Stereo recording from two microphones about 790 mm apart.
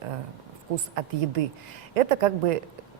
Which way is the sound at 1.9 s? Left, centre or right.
Right.